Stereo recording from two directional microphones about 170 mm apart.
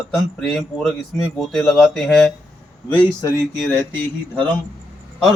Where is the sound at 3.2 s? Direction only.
20° left (ahead or behind).